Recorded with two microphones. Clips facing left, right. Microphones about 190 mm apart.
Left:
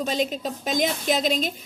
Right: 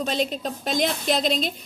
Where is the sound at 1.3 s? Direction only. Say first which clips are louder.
Even; 45° left (ahead or behind).